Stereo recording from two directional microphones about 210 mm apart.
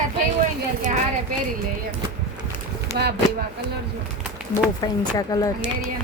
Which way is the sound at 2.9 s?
50° right (ahead or behind).